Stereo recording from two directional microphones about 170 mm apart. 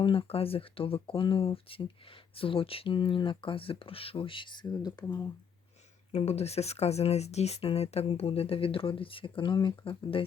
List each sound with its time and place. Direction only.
0.0 s speech: 30° left (ahead or behind)
6.1 s speech: 35° left (ahead or behind)